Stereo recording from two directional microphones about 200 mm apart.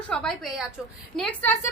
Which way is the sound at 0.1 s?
5° left (ahead or behind).